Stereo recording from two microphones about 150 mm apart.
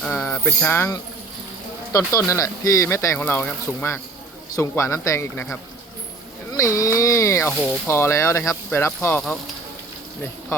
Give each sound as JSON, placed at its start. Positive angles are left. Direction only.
{"t": 0.0, "sound": "music", "side_deg": 10}
{"t": 1.9, "sound": "speech", "side_deg": 20}
{"t": 6.5, "sound": "speech", "side_deg": 20}